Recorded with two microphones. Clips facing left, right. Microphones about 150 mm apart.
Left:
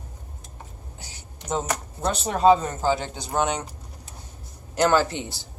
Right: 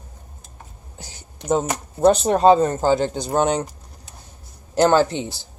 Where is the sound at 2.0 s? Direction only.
40° right (ahead or behind).